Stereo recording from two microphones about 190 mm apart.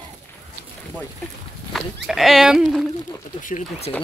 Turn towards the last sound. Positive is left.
turn(degrees=45)  # may be behind; listen again after turning